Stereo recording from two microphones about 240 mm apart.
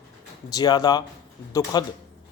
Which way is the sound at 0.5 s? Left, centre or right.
Centre.